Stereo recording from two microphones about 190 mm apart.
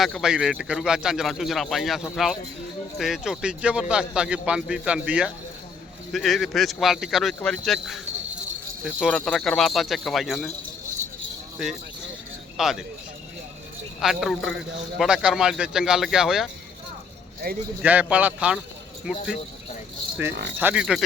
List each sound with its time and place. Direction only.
0.0 s a man's voice: centre (ahead or behind)
11.5 s speech: centre (ahead or behind)
14.0 s a man's voice: centre (ahead or behind)
17.4 s speech: 55° right (ahead or behind)
17.8 s a man's voice: 10° right (ahead or behind)
20.6 s a man's voice: 5° right (ahead or behind)